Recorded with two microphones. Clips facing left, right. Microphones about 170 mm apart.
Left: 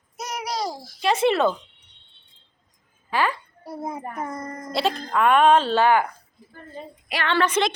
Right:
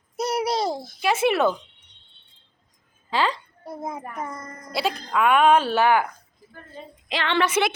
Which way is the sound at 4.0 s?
30° left (ahead or behind).